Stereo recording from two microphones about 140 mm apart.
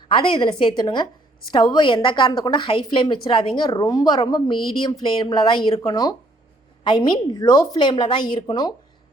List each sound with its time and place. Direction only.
0.1 s a woman's voice: 35° left (ahead or behind)